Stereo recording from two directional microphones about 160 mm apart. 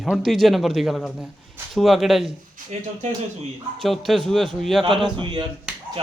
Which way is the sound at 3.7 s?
Centre (ahead or behind).